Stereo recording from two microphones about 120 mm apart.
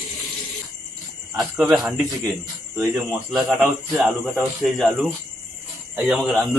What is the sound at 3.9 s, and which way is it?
Speech, 5° right (ahead or behind).